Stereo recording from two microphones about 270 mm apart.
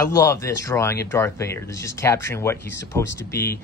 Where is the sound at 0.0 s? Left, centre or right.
Centre.